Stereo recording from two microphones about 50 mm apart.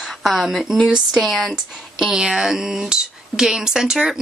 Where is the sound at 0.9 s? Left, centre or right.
Centre.